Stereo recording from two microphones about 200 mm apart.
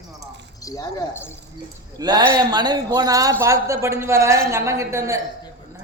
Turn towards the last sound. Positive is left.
turn(degrees=-15)  # may be behind; listen again after turning